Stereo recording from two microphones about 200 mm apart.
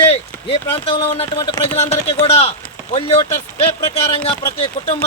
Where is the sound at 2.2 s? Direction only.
30° left (ahead or behind).